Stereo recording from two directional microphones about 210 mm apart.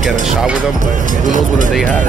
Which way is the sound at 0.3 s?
5° right (ahead or behind).